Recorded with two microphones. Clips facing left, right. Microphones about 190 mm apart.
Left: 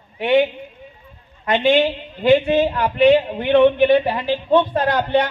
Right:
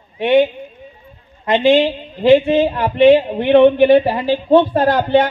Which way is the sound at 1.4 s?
25° right (ahead or behind).